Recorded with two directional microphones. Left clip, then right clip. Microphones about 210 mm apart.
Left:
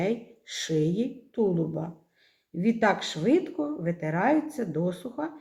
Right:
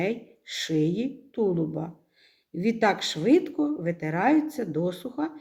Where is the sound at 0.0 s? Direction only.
25° right (ahead or behind).